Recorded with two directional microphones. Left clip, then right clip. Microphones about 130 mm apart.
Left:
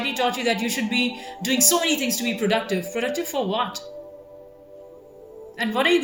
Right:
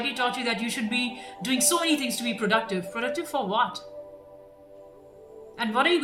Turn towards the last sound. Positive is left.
turn(degrees=-25)  # may be behind; listen again after turning